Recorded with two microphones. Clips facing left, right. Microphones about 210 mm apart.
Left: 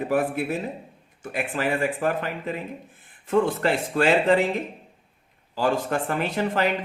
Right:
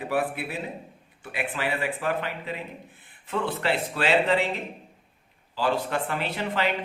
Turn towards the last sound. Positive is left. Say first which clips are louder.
# left 4 dB
turn(degrees=45)  # may be behind; listen again after turning